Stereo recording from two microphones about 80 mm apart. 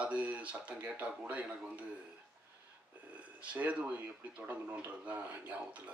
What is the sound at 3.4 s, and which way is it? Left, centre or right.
Speech, centre.